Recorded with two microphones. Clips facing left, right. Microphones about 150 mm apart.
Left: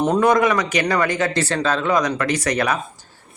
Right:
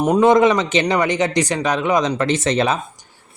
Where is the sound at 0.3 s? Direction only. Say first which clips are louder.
Right 3 dB; 25° right (ahead or behind).